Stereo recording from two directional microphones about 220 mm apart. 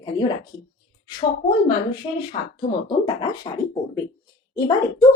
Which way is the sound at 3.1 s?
20° left (ahead or behind).